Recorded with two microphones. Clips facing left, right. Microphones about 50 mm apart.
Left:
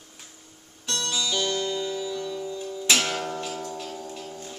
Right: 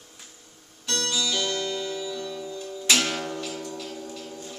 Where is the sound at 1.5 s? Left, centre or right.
Centre.